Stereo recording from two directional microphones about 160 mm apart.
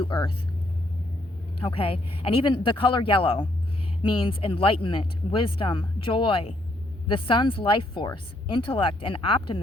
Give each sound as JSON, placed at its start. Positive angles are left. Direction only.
{"t": 0.0, "sound": "speech", "side_deg": 30}
{"t": 1.5, "sound": "speech", "side_deg": 35}